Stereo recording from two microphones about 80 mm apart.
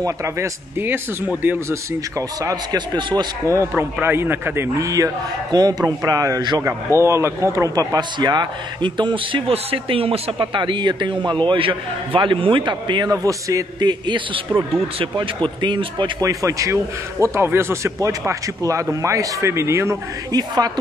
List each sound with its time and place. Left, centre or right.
0.0 s a man's voice: right
0.8 s a man's voice: right
2.1 s a man's voice: right
3.0 s speech: right
3.7 s a man's voice: right
4.7 s a man's voice: right
6.6 s a man's voice: right
10.4 s a man's voice: right
13.1 s a man's voice: right
13.7 s a man's voice: right
16.2 s a man's voice: right
20.3 s speech: right